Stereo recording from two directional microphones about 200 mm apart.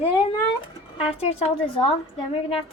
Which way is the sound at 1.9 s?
30° left (ahead or behind).